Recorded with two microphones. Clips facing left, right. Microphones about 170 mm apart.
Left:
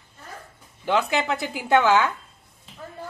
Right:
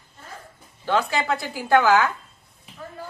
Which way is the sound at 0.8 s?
20° left (ahead or behind).